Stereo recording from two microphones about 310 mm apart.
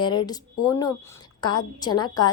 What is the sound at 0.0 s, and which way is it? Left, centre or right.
A woman's voice, centre.